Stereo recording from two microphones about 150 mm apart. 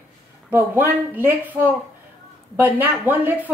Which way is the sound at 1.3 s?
15° right (ahead or behind).